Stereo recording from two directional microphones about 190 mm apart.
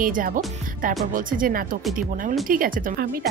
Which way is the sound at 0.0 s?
45° right (ahead or behind).